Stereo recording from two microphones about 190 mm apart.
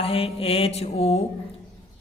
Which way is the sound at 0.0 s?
30° left (ahead or behind).